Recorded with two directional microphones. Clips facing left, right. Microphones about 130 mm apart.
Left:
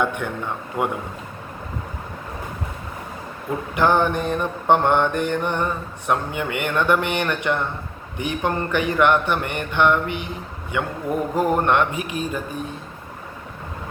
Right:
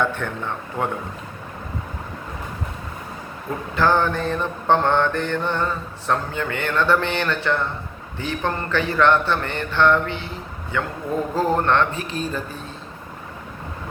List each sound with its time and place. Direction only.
0.0 s mantra: 15° left (ahead or behind)
3.8 s mantra: 15° left (ahead or behind)